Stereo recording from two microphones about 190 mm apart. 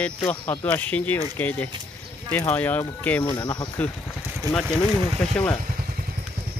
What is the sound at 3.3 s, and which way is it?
Speech, 20° left (ahead or behind).